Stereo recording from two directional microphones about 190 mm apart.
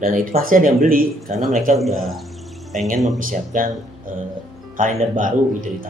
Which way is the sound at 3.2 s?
45° right (ahead or behind).